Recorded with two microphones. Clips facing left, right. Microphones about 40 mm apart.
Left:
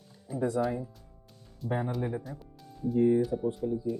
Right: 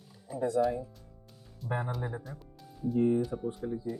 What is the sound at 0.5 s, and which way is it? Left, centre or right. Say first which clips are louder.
Speech: right 1 dB; centre.